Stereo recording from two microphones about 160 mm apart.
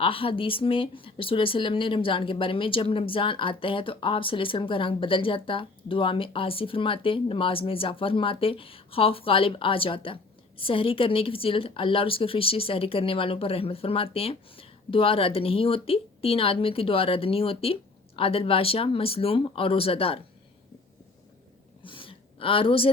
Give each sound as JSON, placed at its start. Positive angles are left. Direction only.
{"t": 0.0, "sound": "speech", "side_deg": 35}
{"t": 21.8, "sound": "gasp", "side_deg": 30}